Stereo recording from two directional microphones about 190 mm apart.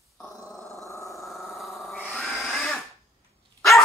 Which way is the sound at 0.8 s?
15° left (ahead or behind).